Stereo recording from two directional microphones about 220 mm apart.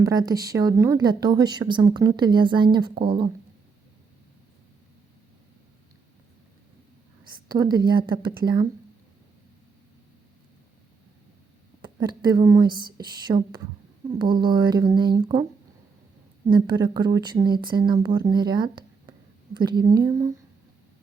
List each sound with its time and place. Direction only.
0.0 s a woman's voice: 15° right (ahead or behind)
7.4 s speech: 20° right (ahead or behind)
11.8 s speech: 20° right (ahead or behind)
16.5 s a woman's voice: 20° right (ahead or behind)